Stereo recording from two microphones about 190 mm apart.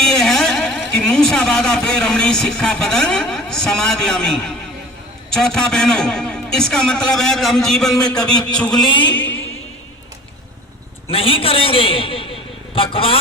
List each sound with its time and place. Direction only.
0.0 s a man's voice: centre (ahead or behind)
8.8 s a sound: 25° left (ahead or behind)
11.1 s a man's voice: 30° left (ahead or behind)